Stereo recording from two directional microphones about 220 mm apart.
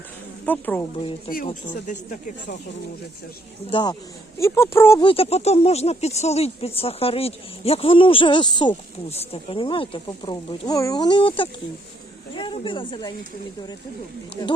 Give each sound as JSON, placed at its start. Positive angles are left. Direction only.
{"t": 0.4, "sound": "speech", "side_deg": 10}
{"t": 1.5, "sound": "speech", "side_deg": 35}
{"t": 3.7, "sound": "speech", "side_deg": 20}
{"t": 5.0, "sound": "speech", "side_deg": 25}
{"t": 14.4, "sound": "speech", "side_deg": 15}